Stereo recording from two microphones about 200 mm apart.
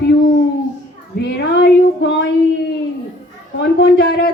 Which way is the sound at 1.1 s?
55° left (ahead or behind).